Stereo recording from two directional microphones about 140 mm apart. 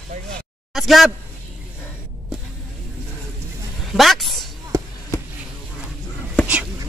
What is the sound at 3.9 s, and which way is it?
Speech, centre (ahead or behind).